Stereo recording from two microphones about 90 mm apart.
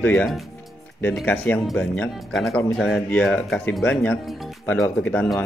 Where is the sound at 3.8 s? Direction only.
15° left (ahead or behind).